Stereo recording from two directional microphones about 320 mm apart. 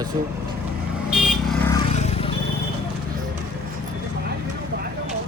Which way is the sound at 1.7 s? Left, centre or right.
Centre.